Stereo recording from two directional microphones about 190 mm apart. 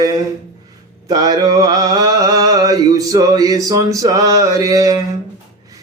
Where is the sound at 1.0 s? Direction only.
20° right (ahead or behind).